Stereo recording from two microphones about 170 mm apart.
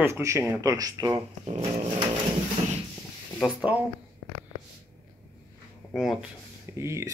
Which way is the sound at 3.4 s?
10° right (ahead or behind).